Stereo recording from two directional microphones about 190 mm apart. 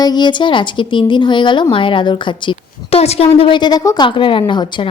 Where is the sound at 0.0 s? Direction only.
20° left (ahead or behind).